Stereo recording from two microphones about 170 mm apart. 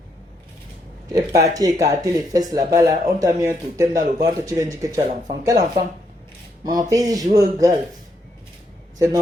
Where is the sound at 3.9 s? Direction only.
50° right (ahead or behind).